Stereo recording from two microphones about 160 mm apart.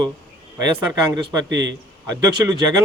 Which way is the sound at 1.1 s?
25° right (ahead or behind).